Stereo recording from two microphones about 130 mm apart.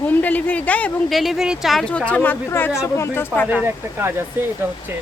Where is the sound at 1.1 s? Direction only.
Centre (ahead or behind); by 3.5 s 15° left (ahead or behind).